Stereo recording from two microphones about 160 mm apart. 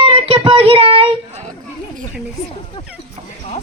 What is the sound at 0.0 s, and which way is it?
Child singing, 35° right (ahead or behind).